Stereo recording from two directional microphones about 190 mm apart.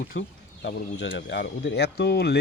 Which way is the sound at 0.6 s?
70° left (ahead or behind).